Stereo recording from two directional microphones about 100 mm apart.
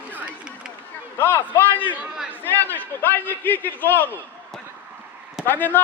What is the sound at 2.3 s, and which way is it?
A man's voice, 20° left (ahead or behind).